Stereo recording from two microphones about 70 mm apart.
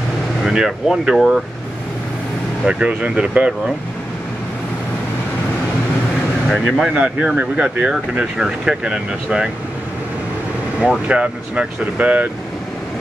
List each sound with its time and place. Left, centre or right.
0.4 s speech: centre
2.6 s speech: centre
6.5 s speech: centre
10.8 s speech: centre